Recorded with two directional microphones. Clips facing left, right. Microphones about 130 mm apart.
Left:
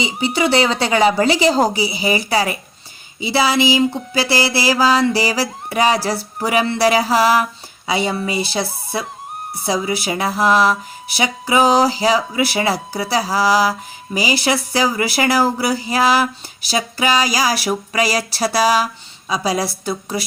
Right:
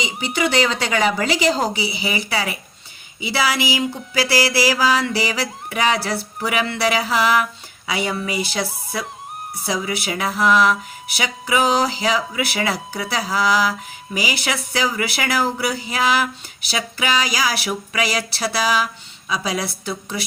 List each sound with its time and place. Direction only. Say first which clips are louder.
0.0 s speech: left 4 dB; 30° left (ahead or behind)